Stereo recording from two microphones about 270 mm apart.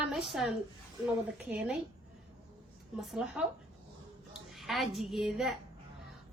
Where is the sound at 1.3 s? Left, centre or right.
Centre.